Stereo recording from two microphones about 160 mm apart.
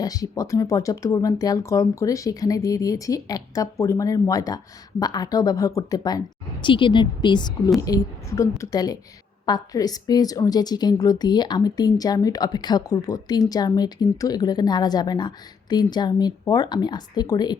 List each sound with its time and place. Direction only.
0.0 s speech: 25° left (ahead or behind)